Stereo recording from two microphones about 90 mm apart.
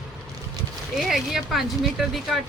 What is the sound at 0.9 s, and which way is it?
Speech, centre (ahead or behind).